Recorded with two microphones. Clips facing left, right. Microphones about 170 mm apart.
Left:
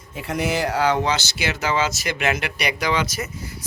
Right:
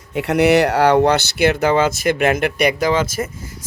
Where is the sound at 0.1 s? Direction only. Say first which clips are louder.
Right 10 dB; 70° right (ahead or behind).